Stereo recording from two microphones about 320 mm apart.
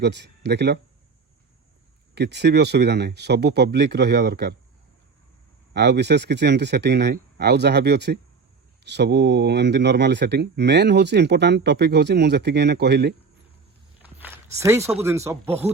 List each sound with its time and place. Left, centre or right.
0.0 s speech: right
2.1 s speech: right
5.7 s speech: right
14.0 s walk: centre
15.0 s speech: centre